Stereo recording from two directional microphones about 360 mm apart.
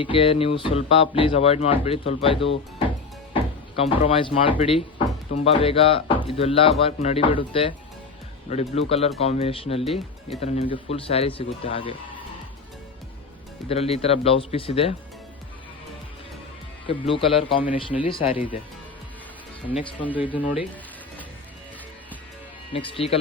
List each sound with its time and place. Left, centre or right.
0.0 s speech: centre
3.8 s speech: centre
13.7 s speech: centre
16.8 s speech: centre
19.6 s speech: centre
22.7 s speech: centre